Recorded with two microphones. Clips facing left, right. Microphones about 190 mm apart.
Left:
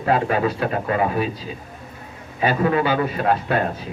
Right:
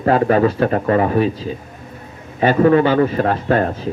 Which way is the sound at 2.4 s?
40° right (ahead or behind).